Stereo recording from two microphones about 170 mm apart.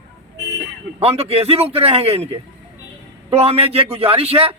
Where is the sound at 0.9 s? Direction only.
35° right (ahead or behind).